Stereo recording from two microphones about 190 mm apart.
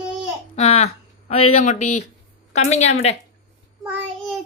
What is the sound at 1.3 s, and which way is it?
Speech, 30° left (ahead or behind).